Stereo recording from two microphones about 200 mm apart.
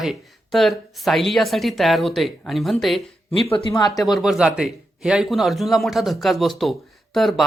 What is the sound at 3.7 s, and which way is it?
Speech, 20° left (ahead or behind).